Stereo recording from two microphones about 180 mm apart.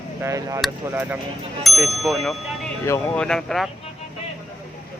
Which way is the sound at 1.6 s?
Centre (ahead or behind).